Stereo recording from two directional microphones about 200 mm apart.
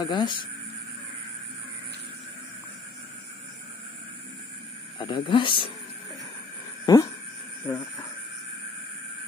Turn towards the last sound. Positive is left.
turn(degrees=20)  # may be behind; listen again after turning